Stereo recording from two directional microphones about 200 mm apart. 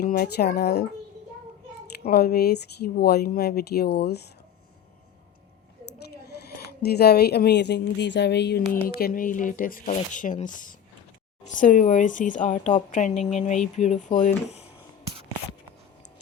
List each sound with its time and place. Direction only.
0.0 s speech: 50° left (ahead or behind)
2.0 s speech: 50° left (ahead or behind)
6.2 s speech: 55° left (ahead or behind); by 14.7 s 35° left (ahead or behind)